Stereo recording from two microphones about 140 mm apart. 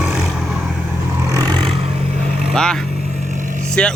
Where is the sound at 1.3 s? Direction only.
30° right (ahead or behind).